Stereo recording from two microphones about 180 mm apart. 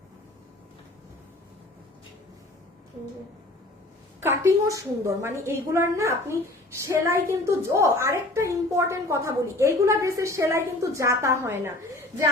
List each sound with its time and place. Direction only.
4.2 s a woman's voice: 15° right (ahead or behind)